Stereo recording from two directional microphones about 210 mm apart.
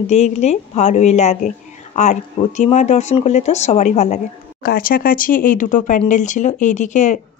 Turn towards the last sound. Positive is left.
turn(degrees=35)  # may be behind; listen again after turning